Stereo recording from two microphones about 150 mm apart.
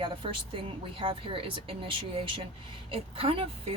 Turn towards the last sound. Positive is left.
turn(degrees=-40)  # may be behind; listen again after turning